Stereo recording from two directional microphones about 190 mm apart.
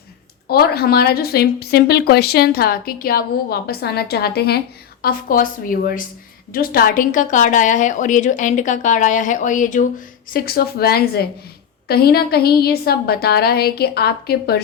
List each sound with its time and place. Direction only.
0.4 s a woman's voice: 55° left (ahead or behind)
5.0 s a woman's voice: 45° left (ahead or behind)
10.3 s a woman's voice: 55° left (ahead or behind)